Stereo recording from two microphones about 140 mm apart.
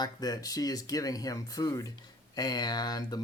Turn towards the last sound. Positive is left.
turn(degrees=25)  # may be behind; listen again after turning